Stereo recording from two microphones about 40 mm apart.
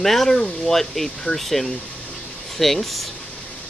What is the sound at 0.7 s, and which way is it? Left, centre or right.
Speech, centre.